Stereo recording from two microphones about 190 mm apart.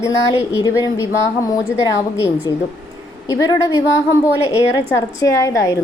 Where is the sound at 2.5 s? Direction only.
20° left (ahead or behind).